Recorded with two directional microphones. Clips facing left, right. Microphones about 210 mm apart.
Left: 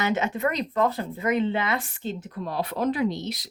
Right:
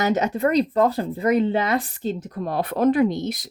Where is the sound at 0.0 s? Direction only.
40° right (ahead or behind).